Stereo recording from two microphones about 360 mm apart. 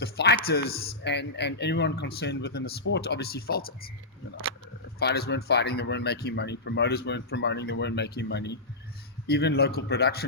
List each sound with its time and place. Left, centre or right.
0.0 s speech: left
4.9 s speech: left